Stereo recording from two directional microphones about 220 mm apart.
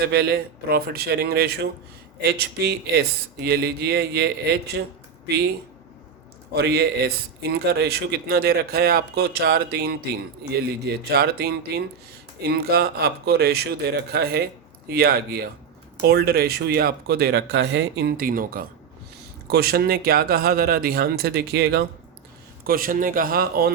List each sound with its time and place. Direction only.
0.0 s speech: 50° right (ahead or behind)
6.5 s speech: 50° right (ahead or behind)